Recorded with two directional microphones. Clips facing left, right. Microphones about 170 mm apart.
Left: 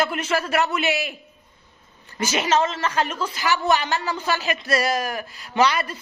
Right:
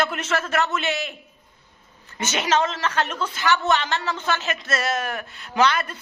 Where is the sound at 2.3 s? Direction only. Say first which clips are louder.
Left 1 dB; 5° left (ahead or behind).